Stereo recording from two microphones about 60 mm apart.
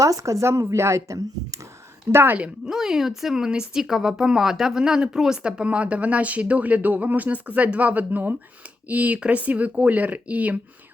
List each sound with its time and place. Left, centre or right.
0.0 s speech: right
2.1 s speech: right
2.6 s speech: centre; by 10.6 s right